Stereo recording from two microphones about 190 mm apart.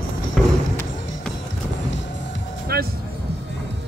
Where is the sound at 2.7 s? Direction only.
55° right (ahead or behind).